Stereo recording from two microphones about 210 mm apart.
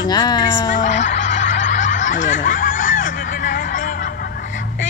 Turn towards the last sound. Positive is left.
turn(degrees=40)  # may be behind; listen again after turning